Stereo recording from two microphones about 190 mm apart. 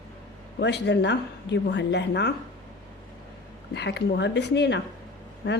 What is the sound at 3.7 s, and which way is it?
A woman's voice, 65° left (ahead or behind).